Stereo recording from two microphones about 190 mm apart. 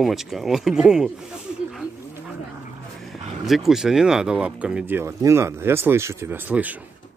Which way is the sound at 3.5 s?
Centre (ahead or behind).